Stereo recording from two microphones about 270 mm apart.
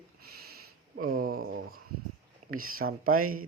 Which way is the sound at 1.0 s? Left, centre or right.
Right.